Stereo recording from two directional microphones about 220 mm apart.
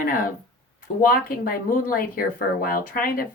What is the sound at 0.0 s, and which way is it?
Speech, 40° left (ahead or behind).